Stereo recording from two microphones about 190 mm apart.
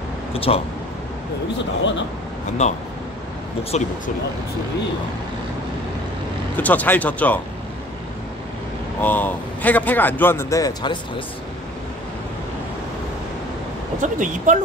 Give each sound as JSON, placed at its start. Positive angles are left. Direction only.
{"t": 0.3, "sound": "speech", "side_deg": 30}
{"t": 2.6, "sound": "speech", "side_deg": 35}
{"t": 6.5, "sound": "speech", "side_deg": 10}
{"t": 9.0, "sound": "speech", "side_deg": 10}
{"t": 14.0, "sound": "speech", "side_deg": -40}